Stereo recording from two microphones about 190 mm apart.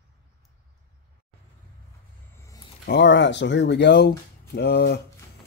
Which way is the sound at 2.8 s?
65° left (ahead or behind).